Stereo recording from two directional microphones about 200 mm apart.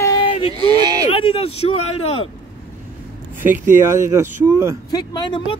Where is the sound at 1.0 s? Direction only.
25° left (ahead or behind).